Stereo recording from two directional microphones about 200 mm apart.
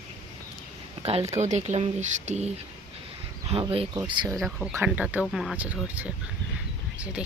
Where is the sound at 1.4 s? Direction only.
35° right (ahead or behind).